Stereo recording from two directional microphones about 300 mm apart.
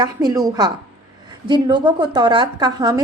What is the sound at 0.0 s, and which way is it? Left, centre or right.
Speech, centre.